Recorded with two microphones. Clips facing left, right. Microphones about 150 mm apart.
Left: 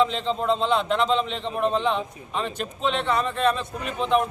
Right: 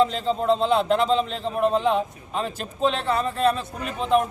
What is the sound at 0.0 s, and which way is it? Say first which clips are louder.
Speech: right 2 dB; 40° right (ahead or behind).